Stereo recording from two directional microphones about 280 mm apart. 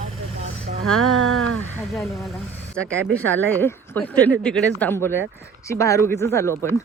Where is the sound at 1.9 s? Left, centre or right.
Centre.